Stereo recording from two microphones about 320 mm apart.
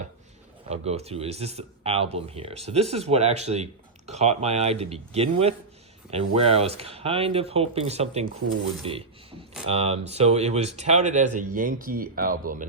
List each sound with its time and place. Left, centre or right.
0.7 s speech: centre